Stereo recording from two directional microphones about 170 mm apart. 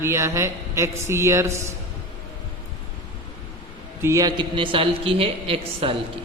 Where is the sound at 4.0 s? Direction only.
20° right (ahead or behind); by 5.9 s 35° right (ahead or behind).